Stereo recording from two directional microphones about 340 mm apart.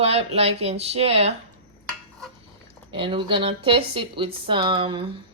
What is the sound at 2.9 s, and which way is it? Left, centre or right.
Speech, centre.